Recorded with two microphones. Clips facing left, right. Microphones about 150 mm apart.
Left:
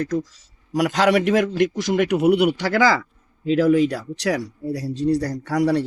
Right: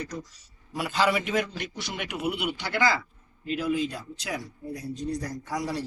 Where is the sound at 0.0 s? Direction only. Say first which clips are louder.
Left 12 dB; 90° left.